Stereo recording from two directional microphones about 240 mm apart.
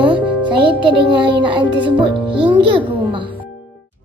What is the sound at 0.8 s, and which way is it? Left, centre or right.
A child's voice, right.